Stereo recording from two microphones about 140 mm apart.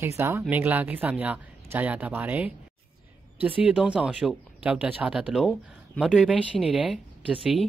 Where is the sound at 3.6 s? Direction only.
10° right (ahead or behind).